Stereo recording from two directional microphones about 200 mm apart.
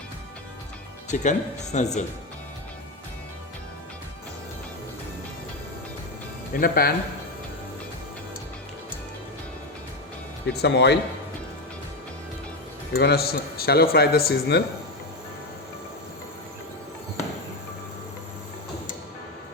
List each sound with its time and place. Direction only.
1.0 s speech: 35° left (ahead or behind)
6.5 s a man's voice: 50° left (ahead or behind)
10.4 s speech: 60° left (ahead or behind)
12.9 s a man's voice: 55° left (ahead or behind)